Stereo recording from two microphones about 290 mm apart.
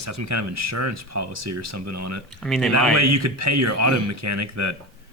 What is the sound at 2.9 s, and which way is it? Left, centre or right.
Speech, right.